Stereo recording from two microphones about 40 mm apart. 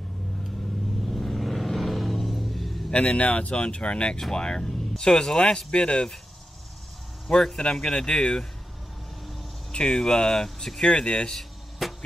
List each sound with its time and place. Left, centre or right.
1.0 s vehicle: centre
2.9 s speech: left
7.2 s speech: centre
9.7 s speech: centre
11.8 s music: centre